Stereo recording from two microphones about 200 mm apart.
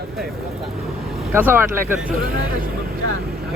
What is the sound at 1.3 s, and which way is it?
Speech, 10° right (ahead or behind).